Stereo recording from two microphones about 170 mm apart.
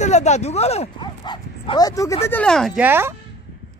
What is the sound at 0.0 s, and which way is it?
Speech, 40° left (ahead or behind).